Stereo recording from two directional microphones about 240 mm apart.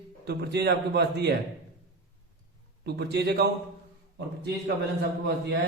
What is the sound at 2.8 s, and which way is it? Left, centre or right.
Speech, right.